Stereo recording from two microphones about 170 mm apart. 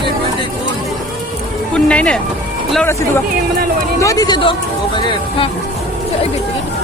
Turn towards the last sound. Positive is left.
turn(degrees=30)  # may be behind; listen again after turning